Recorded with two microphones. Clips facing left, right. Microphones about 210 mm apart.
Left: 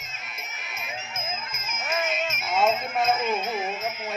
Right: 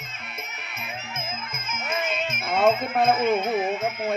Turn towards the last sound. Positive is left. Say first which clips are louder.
# right 5 dB
turn(degrees=-60)  # may be behind; listen again after turning